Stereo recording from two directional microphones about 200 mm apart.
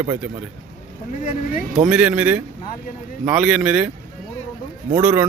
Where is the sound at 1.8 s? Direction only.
5° right (ahead or behind).